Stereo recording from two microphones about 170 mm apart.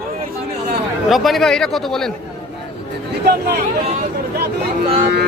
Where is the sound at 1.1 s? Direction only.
Centre (ahead or behind).